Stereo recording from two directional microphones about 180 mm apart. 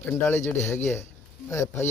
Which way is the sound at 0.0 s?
10° left (ahead or behind).